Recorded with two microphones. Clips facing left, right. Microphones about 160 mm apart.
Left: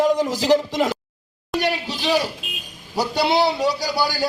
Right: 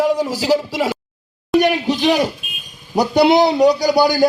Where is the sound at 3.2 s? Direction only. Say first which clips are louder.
Right 8 dB; 20° right (ahead or behind).